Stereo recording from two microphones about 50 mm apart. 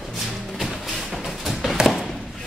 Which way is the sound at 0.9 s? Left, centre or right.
Centre.